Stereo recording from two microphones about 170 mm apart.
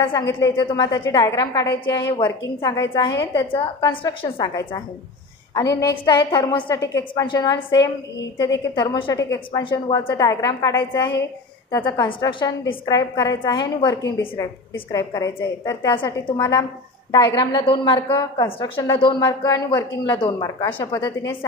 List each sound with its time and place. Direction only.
0.6 s a woman's voice: 20° left (ahead or behind)
1.7 s a woman's voice: 90° left
2.0 s a woman's voice: 25° left (ahead or behind)
8.7 s a woman's voice: 25° left (ahead or behind)
11.7 s a woman's voice: 25° left (ahead or behind)